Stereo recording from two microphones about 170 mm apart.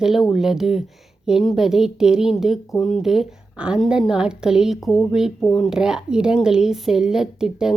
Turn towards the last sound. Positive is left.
turn(degrees=-5)  # may be behind; listen again after turning